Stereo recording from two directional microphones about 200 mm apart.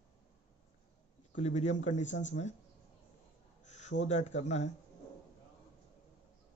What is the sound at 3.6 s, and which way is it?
Speech, 35° left (ahead or behind).